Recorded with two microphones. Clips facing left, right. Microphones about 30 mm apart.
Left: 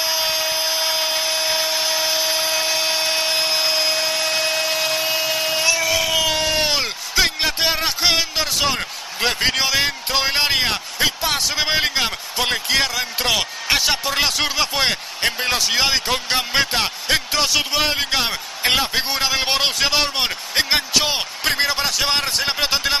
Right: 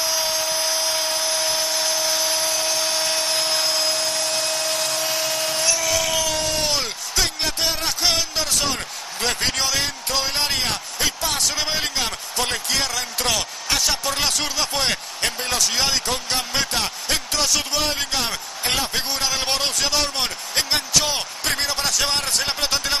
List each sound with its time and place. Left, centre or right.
0.0 s tools: left
9.5 s speech: left